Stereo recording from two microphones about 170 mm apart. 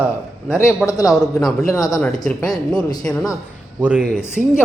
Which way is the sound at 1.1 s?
Centre (ahead or behind).